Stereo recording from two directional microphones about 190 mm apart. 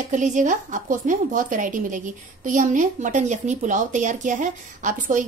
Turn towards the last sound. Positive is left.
turn(degrees=-40)  # may be behind; listen again after turning